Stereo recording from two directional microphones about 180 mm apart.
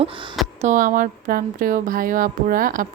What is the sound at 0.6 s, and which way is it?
A woman's voice, 45° right (ahead or behind).